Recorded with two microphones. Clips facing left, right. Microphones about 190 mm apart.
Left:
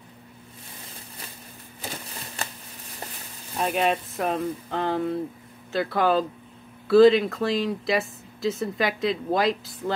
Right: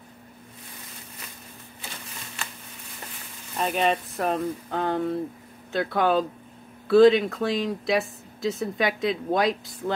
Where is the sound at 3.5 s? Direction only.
Centre (ahead or behind).